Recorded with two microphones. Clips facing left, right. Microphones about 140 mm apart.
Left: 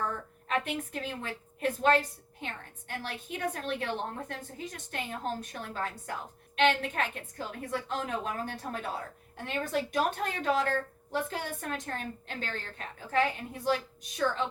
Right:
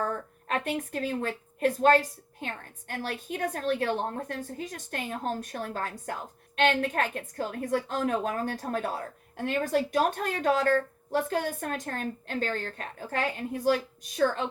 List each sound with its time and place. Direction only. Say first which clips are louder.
0.0 s a woman's voice: right 4 dB; 40° right (ahead or behind)